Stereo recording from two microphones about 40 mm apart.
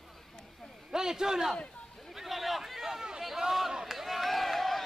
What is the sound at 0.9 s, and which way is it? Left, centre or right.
Speech, centre.